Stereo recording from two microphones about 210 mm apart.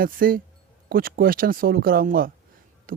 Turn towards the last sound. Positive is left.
turn(degrees=-45)  # may be behind; listen again after turning